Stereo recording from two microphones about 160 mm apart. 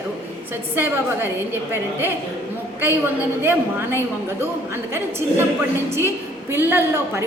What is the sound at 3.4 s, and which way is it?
Speech, 15° right (ahead or behind).